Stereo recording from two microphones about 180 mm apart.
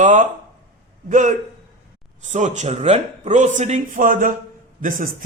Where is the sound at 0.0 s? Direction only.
45° right (ahead or behind).